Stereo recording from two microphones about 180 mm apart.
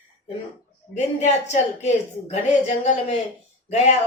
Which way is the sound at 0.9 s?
40° left (ahead or behind).